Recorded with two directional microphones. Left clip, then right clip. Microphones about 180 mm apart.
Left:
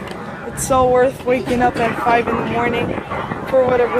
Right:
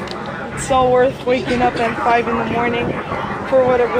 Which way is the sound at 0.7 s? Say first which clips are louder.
Even; 15° left (ahead or behind).